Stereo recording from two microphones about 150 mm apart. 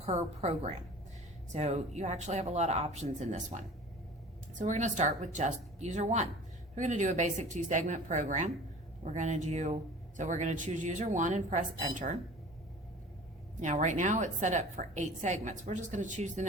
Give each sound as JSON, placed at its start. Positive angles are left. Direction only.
{"t": 0.0, "sound": "a woman's voice", "side_deg": -45}
{"t": 13.6, "sound": "a woman's voice", "side_deg": -55}